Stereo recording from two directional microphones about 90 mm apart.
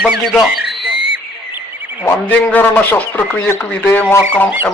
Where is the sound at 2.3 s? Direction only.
20° left (ahead or behind).